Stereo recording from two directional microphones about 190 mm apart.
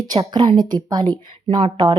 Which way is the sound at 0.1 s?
20° right (ahead or behind).